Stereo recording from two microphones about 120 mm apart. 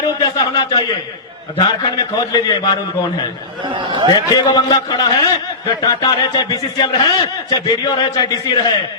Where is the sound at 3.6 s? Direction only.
45° right (ahead or behind).